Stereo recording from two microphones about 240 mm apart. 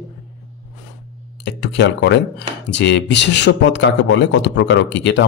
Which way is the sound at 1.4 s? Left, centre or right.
Left.